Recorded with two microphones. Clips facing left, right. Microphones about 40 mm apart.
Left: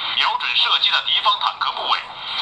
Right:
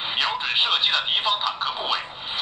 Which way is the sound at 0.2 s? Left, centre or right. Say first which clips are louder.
Left 4 dB; left.